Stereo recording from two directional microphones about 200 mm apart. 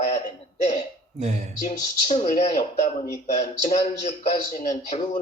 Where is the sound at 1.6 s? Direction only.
40° left (ahead or behind).